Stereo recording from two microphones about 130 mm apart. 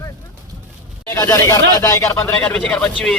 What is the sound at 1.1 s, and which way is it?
Speech, 20° left (ahead or behind).